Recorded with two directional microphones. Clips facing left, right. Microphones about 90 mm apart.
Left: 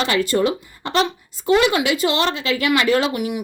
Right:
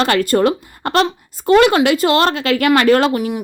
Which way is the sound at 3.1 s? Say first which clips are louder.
Right 4 dB; 40° right (ahead or behind).